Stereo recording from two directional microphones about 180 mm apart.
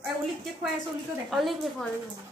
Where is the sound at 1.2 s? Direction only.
Centre (ahead or behind).